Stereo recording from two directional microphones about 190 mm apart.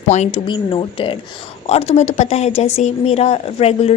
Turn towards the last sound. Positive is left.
turn(degrees=30)  # may be behind; listen again after turning